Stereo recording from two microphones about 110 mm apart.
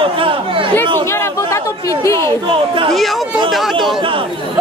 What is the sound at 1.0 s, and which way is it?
Chatter, 25° left (ahead or behind).